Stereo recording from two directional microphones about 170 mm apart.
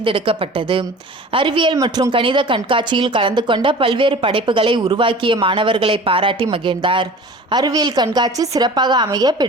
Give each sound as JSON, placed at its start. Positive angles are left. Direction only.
{"t": 0.0, "sound": "a woman's voice", "side_deg": -30}